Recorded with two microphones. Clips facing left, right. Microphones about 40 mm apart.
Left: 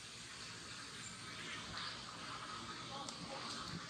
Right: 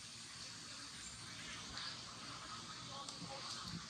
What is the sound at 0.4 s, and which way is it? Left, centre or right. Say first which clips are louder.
Vehicle: left 3 dB; left.